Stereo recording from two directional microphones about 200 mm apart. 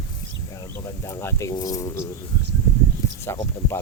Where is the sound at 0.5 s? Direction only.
15° left (ahead or behind).